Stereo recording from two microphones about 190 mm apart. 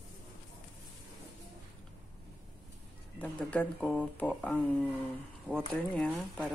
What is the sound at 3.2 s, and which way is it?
Speech, 10° left (ahead or behind).